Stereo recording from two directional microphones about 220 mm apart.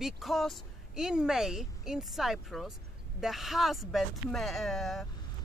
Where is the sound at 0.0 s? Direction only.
Centre (ahead or behind).